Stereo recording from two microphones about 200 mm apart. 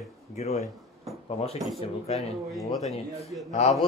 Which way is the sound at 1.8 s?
30° left (ahead or behind).